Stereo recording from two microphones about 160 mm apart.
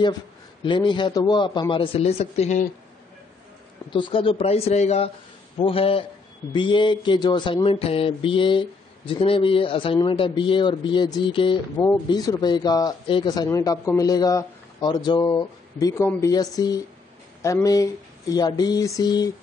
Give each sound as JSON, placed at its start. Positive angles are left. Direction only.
{"t": 0.7, "sound": "mantra", "side_deg": 30}
{"t": 3.9, "sound": "speech", "side_deg": 30}
{"t": 6.5, "sound": "mantra", "side_deg": 30}